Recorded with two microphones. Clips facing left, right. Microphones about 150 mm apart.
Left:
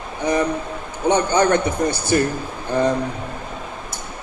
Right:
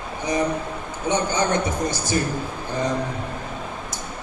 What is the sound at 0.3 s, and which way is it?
A man's voice, 60° left (ahead or behind).